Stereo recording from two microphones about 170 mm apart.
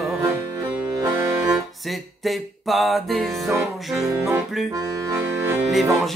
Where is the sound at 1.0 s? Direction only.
20° right (ahead or behind).